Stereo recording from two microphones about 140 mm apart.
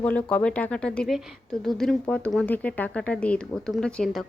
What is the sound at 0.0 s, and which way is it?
Speech, 10° left (ahead or behind).